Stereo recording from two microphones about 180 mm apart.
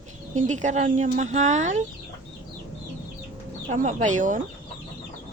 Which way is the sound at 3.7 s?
40° right (ahead or behind).